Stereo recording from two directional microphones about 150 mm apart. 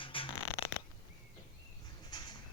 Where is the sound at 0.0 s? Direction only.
35° left (ahead or behind).